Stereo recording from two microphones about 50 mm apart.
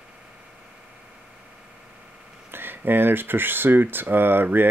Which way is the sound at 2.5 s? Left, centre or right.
Right.